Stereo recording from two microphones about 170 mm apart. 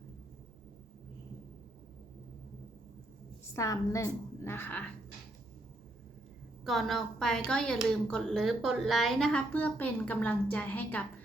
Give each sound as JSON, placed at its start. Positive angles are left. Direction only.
{"t": 3.5, "sound": "a woman's voice", "side_deg": 20}
{"t": 6.7, "sound": "a woman's voice", "side_deg": 0}